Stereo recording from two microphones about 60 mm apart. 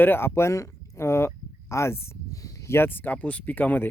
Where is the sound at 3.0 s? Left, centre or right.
Left.